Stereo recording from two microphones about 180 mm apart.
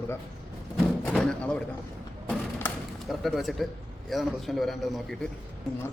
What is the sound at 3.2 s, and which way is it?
A man's voice, centre (ahead or behind).